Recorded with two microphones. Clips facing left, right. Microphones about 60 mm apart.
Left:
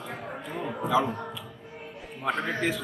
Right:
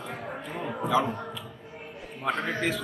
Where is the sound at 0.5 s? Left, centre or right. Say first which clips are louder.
Left 1 dB; centre.